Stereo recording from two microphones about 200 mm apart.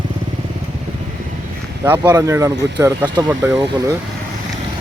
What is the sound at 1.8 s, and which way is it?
Speech, 10° right (ahead or behind).